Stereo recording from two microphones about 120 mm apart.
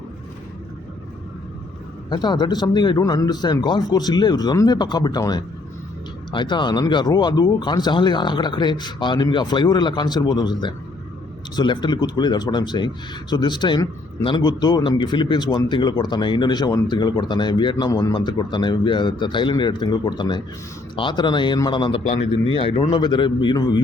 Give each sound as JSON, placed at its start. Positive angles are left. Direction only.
{"t": 2.0, "sound": "speech", "side_deg": 40}
{"t": 22.0, "sound": "speech", "side_deg": 65}
{"t": 22.4, "sound": "a man's voice", "side_deg": 50}
{"t": 23.0, "sound": "speech", "side_deg": 40}